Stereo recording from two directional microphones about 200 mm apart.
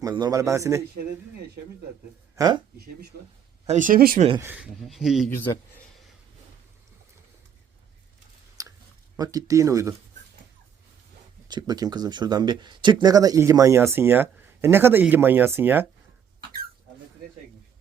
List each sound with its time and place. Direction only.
0.0 s speech: 15° right (ahead or behind)
2.3 s speech: 20° right (ahead or behind)
2.7 s speech: 50° right (ahead or behind)
4.4 s speech: 10° right (ahead or behind)
5.4 s speech: 15° left (ahead or behind)
8.6 s chewing: 15° right (ahead or behind)
9.1 s speech: 20° right (ahead or behind)
11.4 s speech: 20° right (ahead or behind)